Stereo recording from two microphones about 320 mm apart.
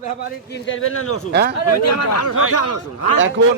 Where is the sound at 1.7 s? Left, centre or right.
Left.